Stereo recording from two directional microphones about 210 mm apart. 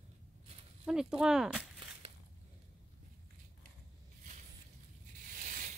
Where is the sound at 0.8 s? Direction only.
5° right (ahead or behind).